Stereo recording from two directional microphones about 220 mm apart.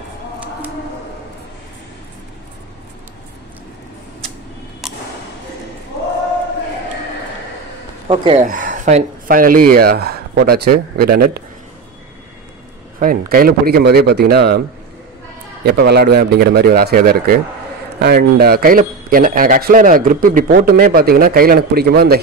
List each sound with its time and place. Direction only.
4.8 s a sound: centre (ahead or behind)
8.1 s speech: 25° right (ahead or behind)
8.5 s speech: 35° right (ahead or behind)
13.0 s a man's voice: 40° right (ahead or behind)
15.6 s a man's voice: 45° right (ahead or behind)